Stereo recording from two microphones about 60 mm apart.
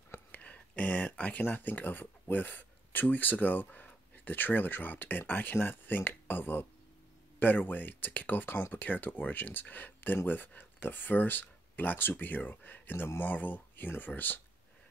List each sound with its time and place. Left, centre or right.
0.3 s speech: left